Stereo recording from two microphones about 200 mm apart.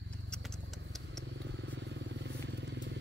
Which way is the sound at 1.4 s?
60° right (ahead or behind).